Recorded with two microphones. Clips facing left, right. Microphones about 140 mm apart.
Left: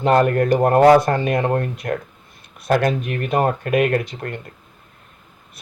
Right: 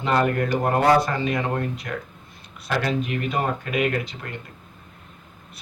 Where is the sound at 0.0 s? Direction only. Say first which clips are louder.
Left 6 dB; 45° left (ahead or behind).